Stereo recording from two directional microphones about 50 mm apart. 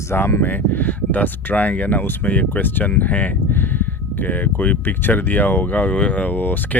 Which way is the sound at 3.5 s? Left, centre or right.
Left.